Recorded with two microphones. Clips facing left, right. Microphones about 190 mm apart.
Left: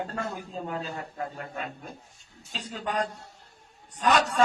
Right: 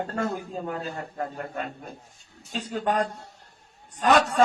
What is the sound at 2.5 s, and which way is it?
A man's voice, 50° right (ahead or behind).